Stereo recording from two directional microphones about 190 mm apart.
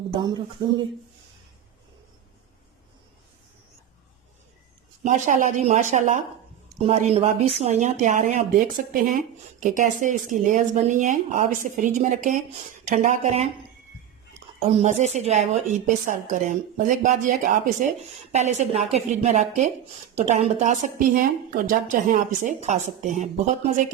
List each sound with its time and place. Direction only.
0.1 s speech: 20° right (ahead or behind)
5.0 s a woman's voice: 40° right (ahead or behind)
14.8 s a woman's voice: 35° right (ahead or behind)